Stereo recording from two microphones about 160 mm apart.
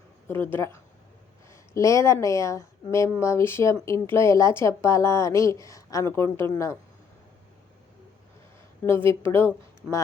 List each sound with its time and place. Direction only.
0.3 s a woman's voice: 15° left (ahead or behind)
9.2 s speech: 10° left (ahead or behind)